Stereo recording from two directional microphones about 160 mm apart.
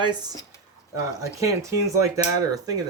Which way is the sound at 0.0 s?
25° right (ahead or behind).